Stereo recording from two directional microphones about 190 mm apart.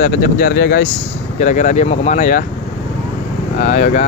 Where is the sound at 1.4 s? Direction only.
40° left (ahead or behind).